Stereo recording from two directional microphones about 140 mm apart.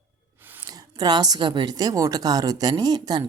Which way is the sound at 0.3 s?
15° right (ahead or behind).